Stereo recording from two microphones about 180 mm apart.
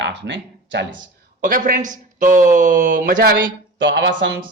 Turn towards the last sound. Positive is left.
turn(degrees=-80)